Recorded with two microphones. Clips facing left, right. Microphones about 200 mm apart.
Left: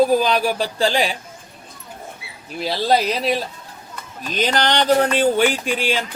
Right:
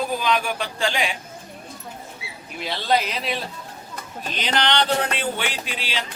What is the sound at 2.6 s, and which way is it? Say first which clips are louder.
A man's voice: left 4 dB; 35° left (ahead or behind).